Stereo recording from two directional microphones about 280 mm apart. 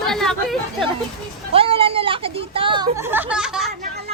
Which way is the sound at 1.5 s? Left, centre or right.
Centre.